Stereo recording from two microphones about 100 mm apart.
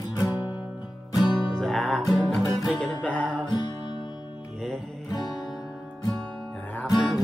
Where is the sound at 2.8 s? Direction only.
10° left (ahead or behind).